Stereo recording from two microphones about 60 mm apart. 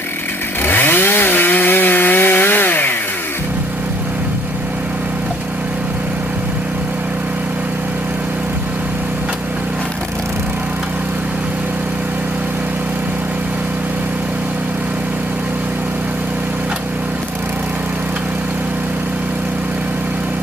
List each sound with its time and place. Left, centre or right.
0.6 s chainsaw: left